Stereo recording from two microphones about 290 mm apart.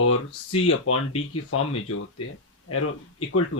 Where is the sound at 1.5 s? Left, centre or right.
Left.